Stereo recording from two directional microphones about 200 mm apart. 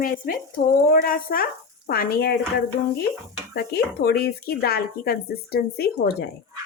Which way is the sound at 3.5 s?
50° left (ahead or behind).